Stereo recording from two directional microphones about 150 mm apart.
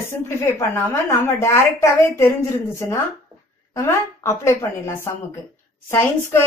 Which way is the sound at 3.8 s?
20° left (ahead or behind).